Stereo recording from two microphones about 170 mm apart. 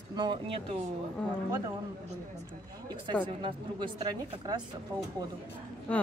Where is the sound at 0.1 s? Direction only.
25° right (ahead or behind).